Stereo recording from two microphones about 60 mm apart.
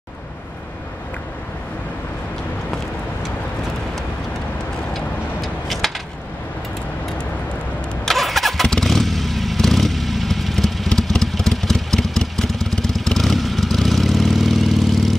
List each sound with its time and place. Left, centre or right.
4.9 s vehicle: centre
8.0 s vehicle: centre
8.6 s motorcycle: centre